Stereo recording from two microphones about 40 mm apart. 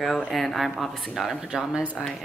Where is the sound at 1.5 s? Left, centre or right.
Centre.